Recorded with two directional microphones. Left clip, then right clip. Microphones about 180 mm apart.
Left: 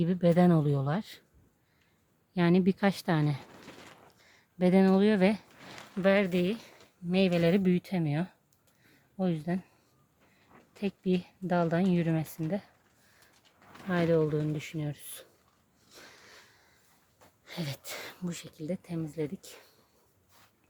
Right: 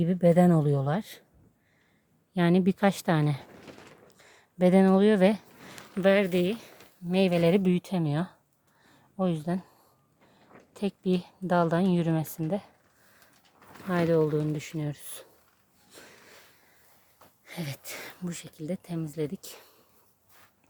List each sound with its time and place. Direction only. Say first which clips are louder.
0.0 s speech: right 3 dB; 5° right (ahead or behind)
2.3 s a woman's voice: right 2 dB; 10° right (ahead or behind)
10.8 s a woman's voice: right 2 dB; 20° right (ahead or behind)
13.9 s speech: right 2 dB; 15° right (ahead or behind)
15.9 s sniff: right 1 dB; 5° right (ahead or behind)
17.4 s speech: even; centre (ahead or behind); by 19.7 s 20° right (ahead or behind)